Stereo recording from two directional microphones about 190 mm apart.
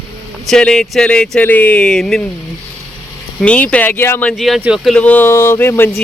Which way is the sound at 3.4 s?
5° left (ahead or behind).